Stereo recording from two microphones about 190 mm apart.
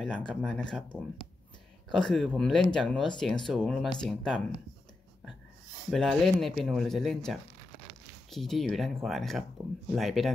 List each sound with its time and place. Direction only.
0.3 s speech: 5° left (ahead or behind)
1.9 s speech: 5° left (ahead or behind)
5.9 s speech: centre (ahead or behind)
9.6 s speech: 10° right (ahead or behind)
9.9 s speech: centre (ahead or behind)